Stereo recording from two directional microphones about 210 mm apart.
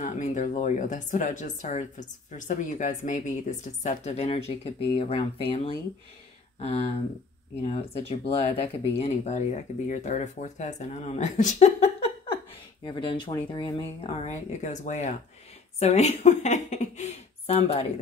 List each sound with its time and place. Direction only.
0.0 s speech: 35° left (ahead or behind); by 14.1 s 20° left (ahead or behind)
14.2 s speech: 35° left (ahead or behind)